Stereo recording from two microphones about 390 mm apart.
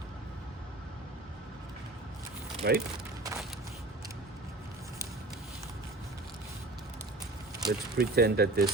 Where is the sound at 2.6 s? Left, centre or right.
Right.